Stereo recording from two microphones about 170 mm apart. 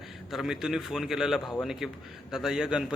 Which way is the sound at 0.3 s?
Centre (ahead or behind).